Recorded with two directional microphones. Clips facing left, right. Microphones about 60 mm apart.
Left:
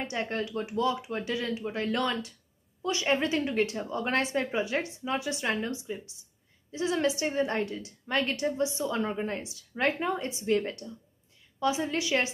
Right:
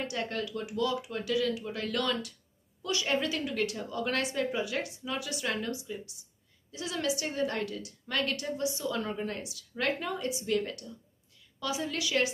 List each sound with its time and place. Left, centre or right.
0.0 s a woman's voice: left